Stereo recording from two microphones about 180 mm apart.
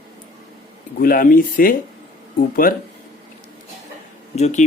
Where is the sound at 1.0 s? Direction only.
50° left (ahead or behind).